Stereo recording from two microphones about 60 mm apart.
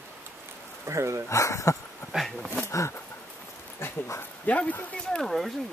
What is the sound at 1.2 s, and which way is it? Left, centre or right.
Speech, left.